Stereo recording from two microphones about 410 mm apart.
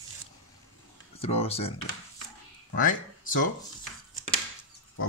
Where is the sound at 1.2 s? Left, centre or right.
Centre.